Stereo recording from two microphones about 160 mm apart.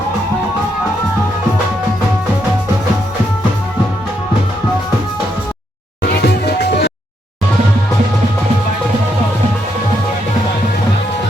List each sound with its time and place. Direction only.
6.0 s music: 90° left